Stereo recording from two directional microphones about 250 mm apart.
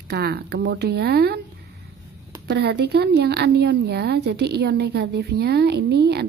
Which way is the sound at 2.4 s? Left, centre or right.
Right.